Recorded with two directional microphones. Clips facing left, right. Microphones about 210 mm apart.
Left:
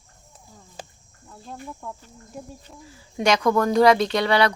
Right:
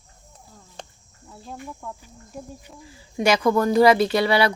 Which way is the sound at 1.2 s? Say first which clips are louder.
Right 1 dB; 5° right (ahead or behind).